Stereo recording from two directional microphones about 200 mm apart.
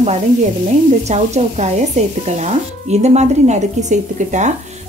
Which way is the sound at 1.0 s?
35° right (ahead or behind).